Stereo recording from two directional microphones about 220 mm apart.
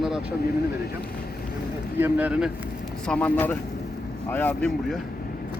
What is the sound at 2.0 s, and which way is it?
Speech, 5° right (ahead or behind).